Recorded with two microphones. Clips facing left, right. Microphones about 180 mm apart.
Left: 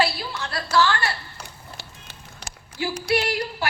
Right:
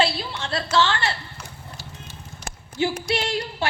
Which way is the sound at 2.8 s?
25° right (ahead or behind).